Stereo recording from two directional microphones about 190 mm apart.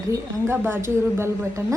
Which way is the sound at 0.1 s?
10° right (ahead or behind).